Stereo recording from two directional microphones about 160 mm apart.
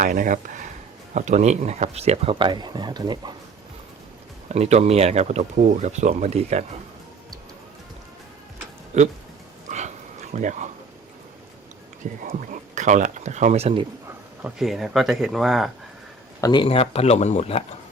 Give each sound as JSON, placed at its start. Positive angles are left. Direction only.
{"t": 0.0, "sound": "speech", "side_deg": -55}
{"t": 4.4, "sound": "speech", "side_deg": -45}
{"t": 8.9, "sound": "speech", "side_deg": -45}
{"t": 9.6, "sound": "dog", "side_deg": -45}
{"t": 10.3, "sound": "speech", "side_deg": -50}
{"t": 12.3, "sound": "speech", "side_deg": -50}
{"t": 14.4, "sound": "speech", "side_deg": 0}
{"t": 16.4, "sound": "speech", "side_deg": 30}